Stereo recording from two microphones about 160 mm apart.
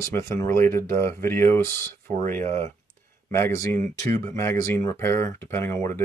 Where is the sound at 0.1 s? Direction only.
15° left (ahead or behind).